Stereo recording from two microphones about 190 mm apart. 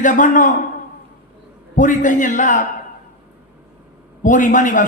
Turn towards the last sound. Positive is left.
turn(degrees=45)  # may be behind; listen again after turning